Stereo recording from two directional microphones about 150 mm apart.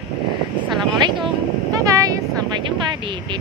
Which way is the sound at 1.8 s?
20° right (ahead or behind).